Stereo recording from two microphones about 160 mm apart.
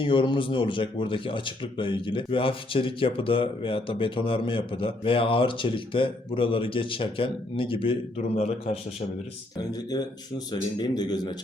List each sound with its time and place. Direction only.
0.0 s speech: 30° left (ahead or behind)
9.6 s a man's voice: 25° left (ahead or behind)